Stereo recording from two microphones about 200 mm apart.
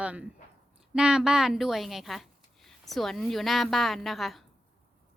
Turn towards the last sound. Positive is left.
turn(degrees=0)  # may be behind; listen again after turning